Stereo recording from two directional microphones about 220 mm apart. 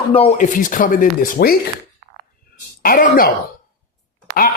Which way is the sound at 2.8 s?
40° left (ahead or behind).